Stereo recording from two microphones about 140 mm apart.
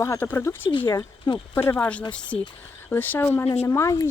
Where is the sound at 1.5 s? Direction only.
15° left (ahead or behind).